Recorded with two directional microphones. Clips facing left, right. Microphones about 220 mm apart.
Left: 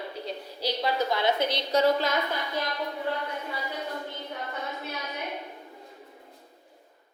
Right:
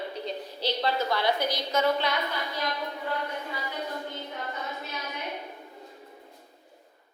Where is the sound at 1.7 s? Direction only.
40° left (ahead or behind).